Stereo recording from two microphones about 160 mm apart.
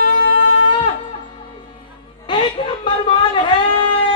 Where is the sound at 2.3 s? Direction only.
30° left (ahead or behind).